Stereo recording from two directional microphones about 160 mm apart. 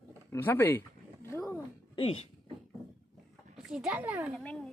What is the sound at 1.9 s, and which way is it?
Speech, 40° left (ahead or behind).